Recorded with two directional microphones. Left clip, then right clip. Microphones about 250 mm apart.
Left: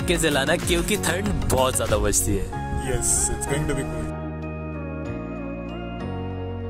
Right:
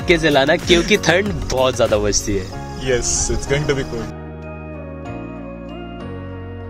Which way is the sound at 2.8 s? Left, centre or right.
Left.